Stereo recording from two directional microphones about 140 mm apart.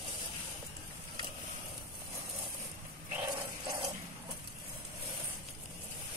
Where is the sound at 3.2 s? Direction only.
30° right (ahead or behind).